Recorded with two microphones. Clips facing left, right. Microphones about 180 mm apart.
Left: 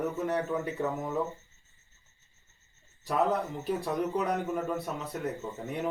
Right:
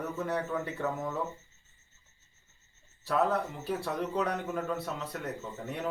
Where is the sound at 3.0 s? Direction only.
15° left (ahead or behind).